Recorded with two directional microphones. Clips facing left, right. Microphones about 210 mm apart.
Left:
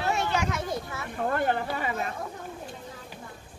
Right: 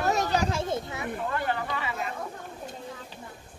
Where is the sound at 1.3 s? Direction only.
50° left (ahead or behind).